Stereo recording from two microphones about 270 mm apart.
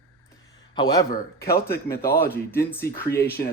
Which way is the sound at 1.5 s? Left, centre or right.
Left.